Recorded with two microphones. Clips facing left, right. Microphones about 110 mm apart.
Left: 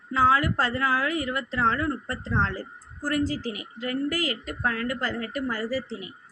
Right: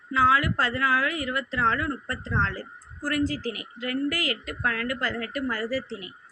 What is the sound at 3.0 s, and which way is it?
A woman's voice, 35° left (ahead or behind).